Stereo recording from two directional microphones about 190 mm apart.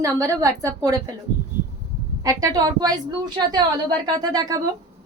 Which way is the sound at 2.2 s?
20° right (ahead or behind).